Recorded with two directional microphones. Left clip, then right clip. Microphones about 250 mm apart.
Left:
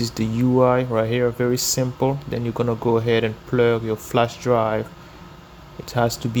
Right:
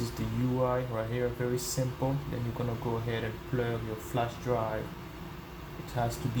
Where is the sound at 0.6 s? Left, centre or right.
Left.